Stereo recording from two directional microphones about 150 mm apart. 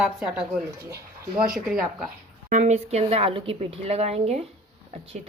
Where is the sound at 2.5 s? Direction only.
50° right (ahead or behind).